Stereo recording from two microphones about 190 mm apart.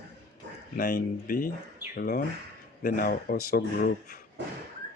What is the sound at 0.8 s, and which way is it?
Speech, 50° left (ahead or behind).